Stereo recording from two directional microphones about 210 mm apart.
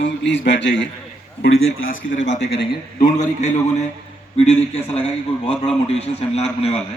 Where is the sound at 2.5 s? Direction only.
40° left (ahead or behind).